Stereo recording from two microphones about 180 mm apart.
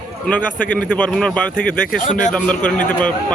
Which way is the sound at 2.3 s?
5° left (ahead or behind).